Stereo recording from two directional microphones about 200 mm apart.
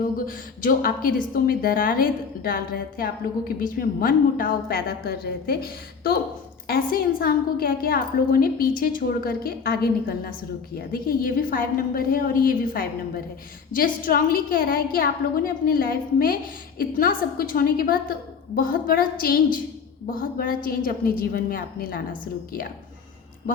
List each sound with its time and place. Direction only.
0.0 s a woman's voice: 45° left (ahead or behind)